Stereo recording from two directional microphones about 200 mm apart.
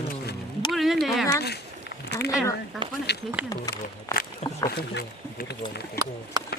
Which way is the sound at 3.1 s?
55° left (ahead or behind).